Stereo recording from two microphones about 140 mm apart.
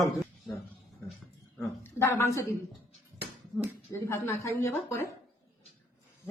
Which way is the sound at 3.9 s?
20° left (ahead or behind).